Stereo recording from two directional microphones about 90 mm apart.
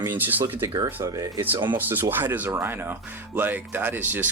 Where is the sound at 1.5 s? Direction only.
55° right (ahead or behind).